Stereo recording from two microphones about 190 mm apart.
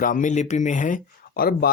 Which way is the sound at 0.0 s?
45° left (ahead or behind).